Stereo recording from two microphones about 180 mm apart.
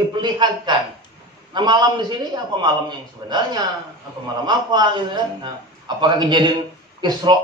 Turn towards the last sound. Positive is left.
turn(degrees=-25)  # may be behind; listen again after turning